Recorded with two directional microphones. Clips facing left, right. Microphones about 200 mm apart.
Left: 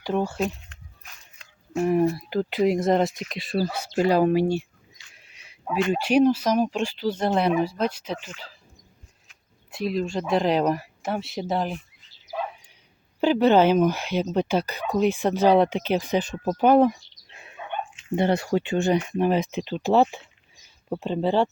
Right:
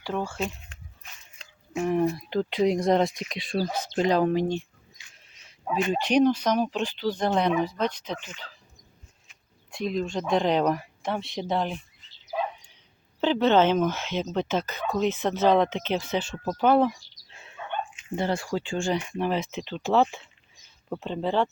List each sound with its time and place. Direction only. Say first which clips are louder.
0.0 s speech: left 5 dB; 15° left (ahead or behind)
1.7 s speech: left 3 dB; 5° left (ahead or behind)
5.2 s a sound: left 3 dB; 10° left (ahead or behind)
5.9 s speech: left 2 dB; 5° left (ahead or behind)
9.7 s speech: left 2 dB; 5° left (ahead or behind)
13.1 s speech: left 3 dB; 15° left (ahead or behind)
17.4 s a sound: left 1 dB; 15° left (ahead or behind)
18.5 s speech: left 5 dB; 20° left (ahead or behind)